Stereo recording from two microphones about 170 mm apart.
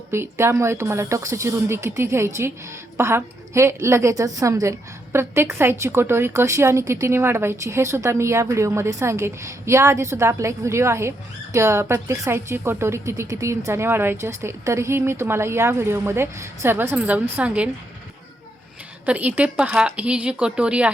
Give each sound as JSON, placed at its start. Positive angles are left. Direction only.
{"t": 0.1, "sound": "a woman's voice", "side_deg": -15}
{"t": 19.0, "sound": "a woman's voice", "side_deg": -10}